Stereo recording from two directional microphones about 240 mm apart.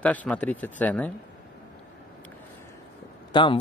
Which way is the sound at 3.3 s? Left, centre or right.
Left.